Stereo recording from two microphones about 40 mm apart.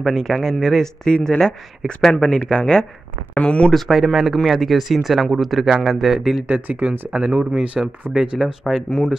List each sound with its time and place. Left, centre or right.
0.0 s speech: centre
1.0 s speech: left
3.9 s speech: centre
6.5 s speech: right
7.8 s speech: centre
8.4 s speech: centre
8.7 s speech: centre